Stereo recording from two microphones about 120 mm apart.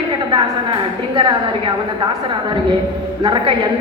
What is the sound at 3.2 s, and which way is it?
Speech, 45° right (ahead or behind).